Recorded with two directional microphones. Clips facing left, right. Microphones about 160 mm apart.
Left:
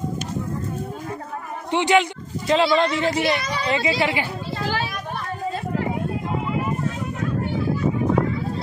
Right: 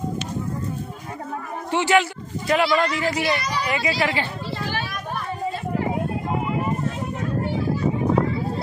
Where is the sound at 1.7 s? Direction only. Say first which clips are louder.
Left 1 dB; 20° left (ahead or behind).